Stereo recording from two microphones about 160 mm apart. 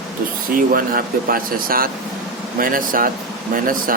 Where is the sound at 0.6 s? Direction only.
65° right (ahead or behind).